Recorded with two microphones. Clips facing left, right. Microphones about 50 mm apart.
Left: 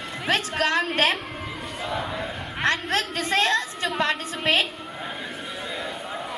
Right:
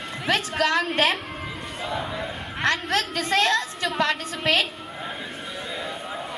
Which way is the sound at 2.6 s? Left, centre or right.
Left.